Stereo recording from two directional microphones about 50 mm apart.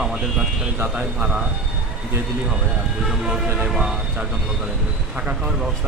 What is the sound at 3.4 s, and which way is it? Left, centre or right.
Speech, right.